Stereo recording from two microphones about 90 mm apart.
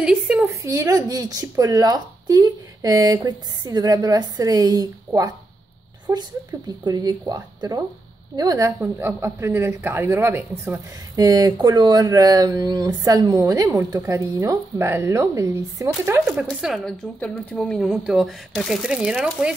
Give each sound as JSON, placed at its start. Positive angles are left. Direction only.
{"t": 0.0, "sound": "a woman's voice", "side_deg": -10}
{"t": 0.7, "sound": "speech", "side_deg": -40}
{"t": 6.8, "sound": "speech", "side_deg": -50}
{"t": 11.1, "sound": "speech", "side_deg": -45}
{"t": 16.4, "sound": "speech", "side_deg": 0}